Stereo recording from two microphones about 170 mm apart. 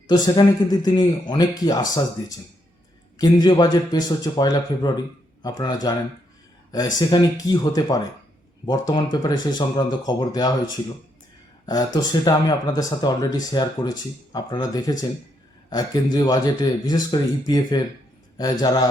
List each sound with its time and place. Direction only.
0.1 s speech: 25° left (ahead or behind)
3.2 s speech: 25° left (ahead or behind)
11.6 s speech: 20° left (ahead or behind)